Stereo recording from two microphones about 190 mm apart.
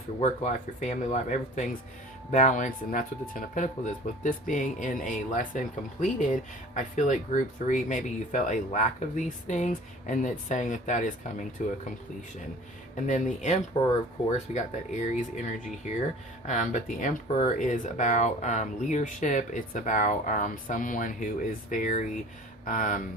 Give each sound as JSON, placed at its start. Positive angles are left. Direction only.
{"t": 0.2, "sound": "speech", "side_deg": 40}
{"t": 13.0, "sound": "speech", "side_deg": 40}
{"t": 16.5, "sound": "speech", "side_deg": 40}